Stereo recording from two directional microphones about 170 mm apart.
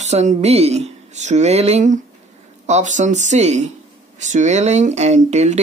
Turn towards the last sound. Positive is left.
turn(degrees=-40)  # may be behind; listen again after turning